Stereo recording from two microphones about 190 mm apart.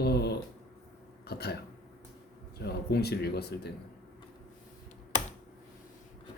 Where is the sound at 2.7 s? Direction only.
60° left (ahead or behind).